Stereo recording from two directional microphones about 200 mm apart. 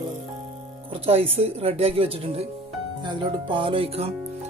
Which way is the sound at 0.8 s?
30° right (ahead or behind).